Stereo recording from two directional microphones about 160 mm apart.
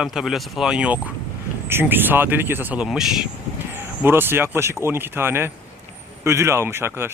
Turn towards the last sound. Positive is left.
turn(degrees=-15)  # may be behind; listen again after turning